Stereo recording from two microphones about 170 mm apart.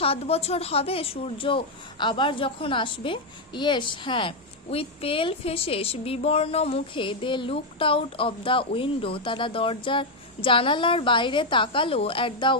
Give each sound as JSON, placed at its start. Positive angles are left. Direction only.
{"t": 0.0, "sound": "speech", "side_deg": 35}